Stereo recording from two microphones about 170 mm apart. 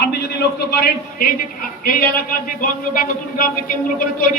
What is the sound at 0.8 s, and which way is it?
A man's voice, 60° left (ahead or behind).